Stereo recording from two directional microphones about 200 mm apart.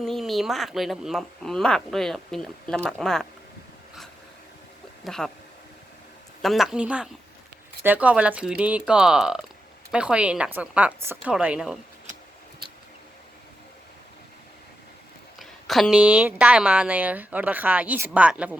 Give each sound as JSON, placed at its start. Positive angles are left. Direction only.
{"t": 0.0, "sound": "speech", "side_deg": 0}
{"t": 5.0, "sound": "speech", "side_deg": 0}
{"t": 6.4, "sound": "speech", "side_deg": 0}
{"t": 15.4, "sound": "speech", "side_deg": 0}